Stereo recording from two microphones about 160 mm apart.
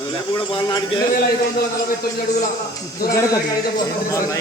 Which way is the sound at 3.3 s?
20° left (ahead or behind).